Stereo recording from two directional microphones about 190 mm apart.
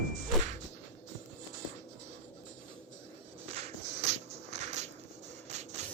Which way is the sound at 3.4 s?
35° right (ahead or behind).